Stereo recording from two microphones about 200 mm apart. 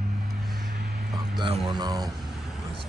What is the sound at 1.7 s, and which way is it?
Speech, 20° right (ahead or behind).